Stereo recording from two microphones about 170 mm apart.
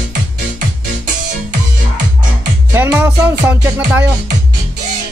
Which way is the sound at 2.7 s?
10° right (ahead or behind).